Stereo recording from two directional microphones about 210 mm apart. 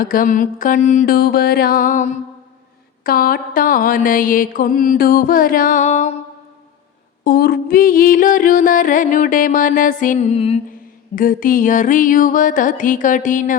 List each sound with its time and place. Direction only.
0.0 s music: 40° left (ahead or behind)
7.3 s music: 45° left (ahead or behind); by 10.6 s 30° left (ahead or behind)
10.7 s music: 40° left (ahead or behind)